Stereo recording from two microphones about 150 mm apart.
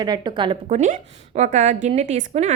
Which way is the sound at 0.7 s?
55° right (ahead or behind).